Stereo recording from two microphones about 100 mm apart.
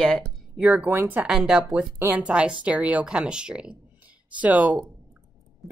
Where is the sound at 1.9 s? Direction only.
20° right (ahead or behind).